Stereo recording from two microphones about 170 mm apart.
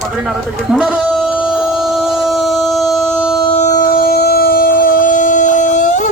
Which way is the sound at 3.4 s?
35° left (ahead or behind).